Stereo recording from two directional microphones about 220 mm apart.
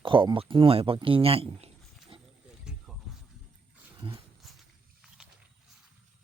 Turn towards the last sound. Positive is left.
turn(degrees=0)  # may be behind; listen again after turning